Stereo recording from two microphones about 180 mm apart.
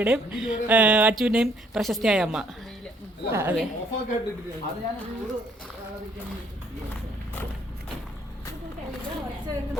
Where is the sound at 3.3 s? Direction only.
15° right (ahead or behind).